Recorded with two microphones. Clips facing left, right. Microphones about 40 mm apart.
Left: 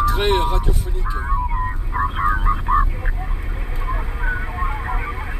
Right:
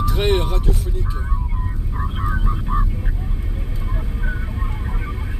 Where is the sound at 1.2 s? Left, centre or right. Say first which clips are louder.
Left 8 dB; left.